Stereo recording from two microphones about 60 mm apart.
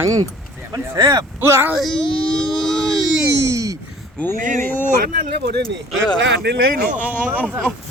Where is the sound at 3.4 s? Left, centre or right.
Right.